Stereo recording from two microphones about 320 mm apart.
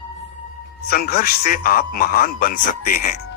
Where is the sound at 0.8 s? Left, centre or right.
Left.